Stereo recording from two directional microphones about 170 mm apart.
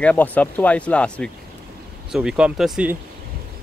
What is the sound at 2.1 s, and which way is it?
Speech, 5° right (ahead or behind).